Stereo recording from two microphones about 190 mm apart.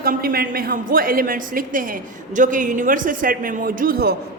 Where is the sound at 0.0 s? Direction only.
50° right (ahead or behind).